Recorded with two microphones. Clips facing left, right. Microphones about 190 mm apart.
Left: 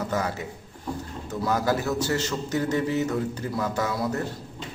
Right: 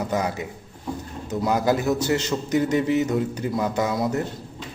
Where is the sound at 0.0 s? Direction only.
15° right (ahead or behind).